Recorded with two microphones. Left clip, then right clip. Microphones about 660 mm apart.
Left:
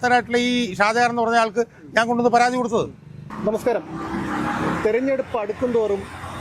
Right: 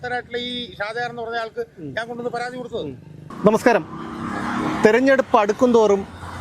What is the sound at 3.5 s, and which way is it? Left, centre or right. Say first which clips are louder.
Speech: right 3 dB; right.